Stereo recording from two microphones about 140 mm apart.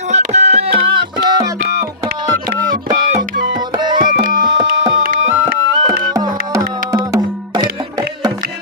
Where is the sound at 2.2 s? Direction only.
30° right (ahead or behind).